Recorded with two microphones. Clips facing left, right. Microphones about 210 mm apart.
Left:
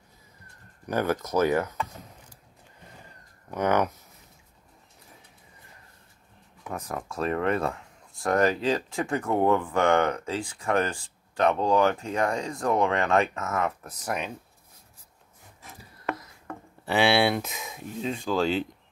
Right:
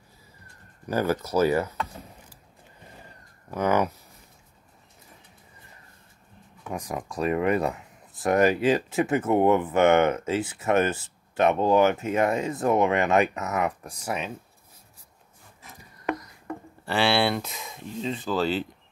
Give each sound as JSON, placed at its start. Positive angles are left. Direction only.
{"t": 0.8, "sound": "speech", "side_deg": -10}
{"t": 3.4, "sound": "speech", "side_deg": -10}
{"t": 6.7, "sound": "speech", "side_deg": -15}
{"t": 16.1, "sound": "a sound", "side_deg": -15}
{"t": 17.2, "sound": "speech", "side_deg": 0}